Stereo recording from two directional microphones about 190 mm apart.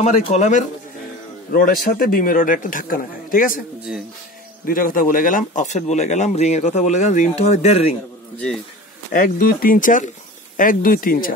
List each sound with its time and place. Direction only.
0.0 s speech: 35° left (ahead or behind)
4.6 s speech: 45° left (ahead or behind)
9.1 s speech: 45° left (ahead or behind)